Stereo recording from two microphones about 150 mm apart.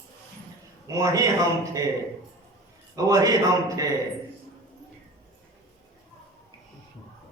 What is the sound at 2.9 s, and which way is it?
Speech, 25° right (ahead or behind).